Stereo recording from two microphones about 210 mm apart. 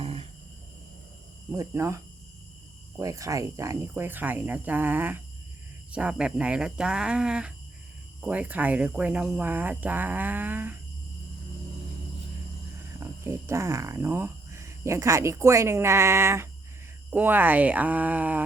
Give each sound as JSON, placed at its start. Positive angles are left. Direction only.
{"t": 0.0, "sound": "a sound", "side_deg": -25}
{"t": 1.5, "sound": "speech", "side_deg": -15}
{"t": 3.0, "sound": "speech", "side_deg": -15}
{"t": 13.0, "sound": "speech", "side_deg": -15}